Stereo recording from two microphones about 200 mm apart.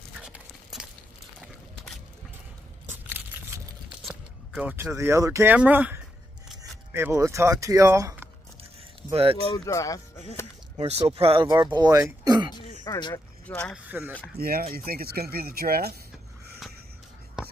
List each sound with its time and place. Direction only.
0.2 s a sound: 5° right (ahead or behind)
4.0 s speech: 5° right (ahead or behind)
9.1 s speech: 30° right (ahead or behind)
9.7 s speech: 15° left (ahead or behind)
10.8 s speech: 30° right (ahead or behind)
12.8 s speech: 15° left (ahead or behind)
13.8 s speech: 10° right (ahead or behind)
14.3 s speech: 50° right (ahead or behind)